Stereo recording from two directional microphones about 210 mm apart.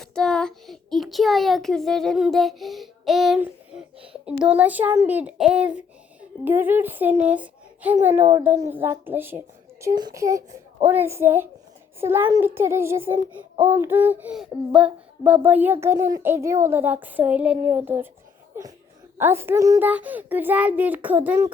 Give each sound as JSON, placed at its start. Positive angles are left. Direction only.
{"t": 0.0, "sound": "a child's voice", "side_deg": 0}
{"t": 4.3, "sound": "child singing", "side_deg": -5}
{"t": 19.1, "sound": "child singing", "side_deg": -10}